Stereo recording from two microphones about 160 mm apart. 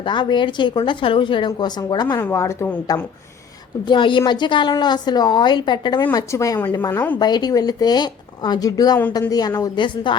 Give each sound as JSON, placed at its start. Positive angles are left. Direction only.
{"t": 0.0, "sound": "a woman's voice", "side_deg": 30}
{"t": 6.9, "sound": "a woman's voice", "side_deg": 10}
{"t": 7.2, "sound": "a woman's voice", "side_deg": 25}